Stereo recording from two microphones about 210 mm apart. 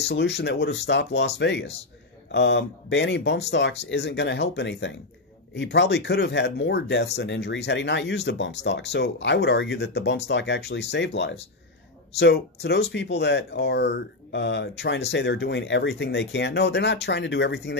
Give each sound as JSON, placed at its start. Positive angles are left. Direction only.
{"t": 0.1, "sound": "speech", "side_deg": 50}